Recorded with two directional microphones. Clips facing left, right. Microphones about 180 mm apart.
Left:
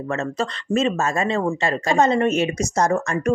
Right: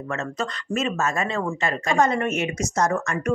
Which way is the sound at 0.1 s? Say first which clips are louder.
Left 4 dB; 30° left (ahead or behind).